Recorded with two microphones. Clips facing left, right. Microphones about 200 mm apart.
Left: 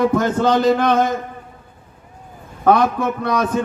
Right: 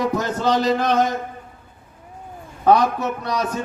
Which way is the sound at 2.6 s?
55° left (ahead or behind).